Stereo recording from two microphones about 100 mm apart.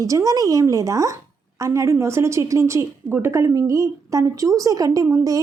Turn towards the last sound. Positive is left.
turn(degrees=-35)  # may be behind; listen again after turning